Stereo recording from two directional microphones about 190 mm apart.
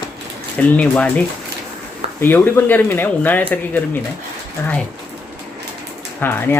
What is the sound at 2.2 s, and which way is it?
Speech, 10° left (ahead or behind).